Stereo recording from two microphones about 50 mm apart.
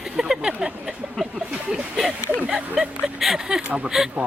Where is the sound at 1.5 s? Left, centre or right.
Right.